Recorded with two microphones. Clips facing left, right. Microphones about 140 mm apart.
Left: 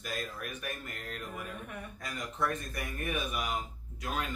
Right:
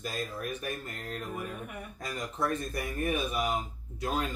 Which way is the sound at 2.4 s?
35° right (ahead or behind).